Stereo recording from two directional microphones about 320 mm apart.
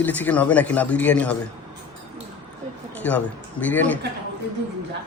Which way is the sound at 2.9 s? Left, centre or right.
Centre.